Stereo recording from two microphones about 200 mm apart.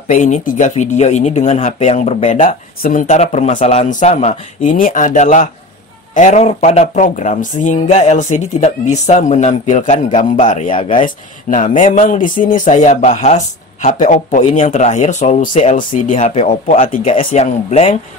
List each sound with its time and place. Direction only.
0.1 s speech: 40° left (ahead or behind)